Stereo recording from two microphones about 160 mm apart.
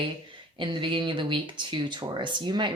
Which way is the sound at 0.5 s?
30° right (ahead or behind).